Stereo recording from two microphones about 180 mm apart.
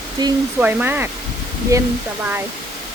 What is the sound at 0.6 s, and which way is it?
Speech, 10° right (ahead or behind).